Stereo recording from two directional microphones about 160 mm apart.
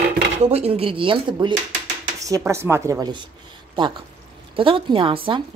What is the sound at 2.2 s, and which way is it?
Speech, 20° right (ahead or behind).